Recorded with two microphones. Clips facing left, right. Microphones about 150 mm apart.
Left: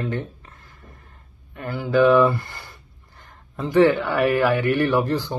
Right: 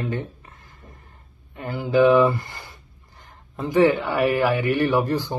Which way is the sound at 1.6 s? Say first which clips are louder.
Even; 15° right (ahead or behind).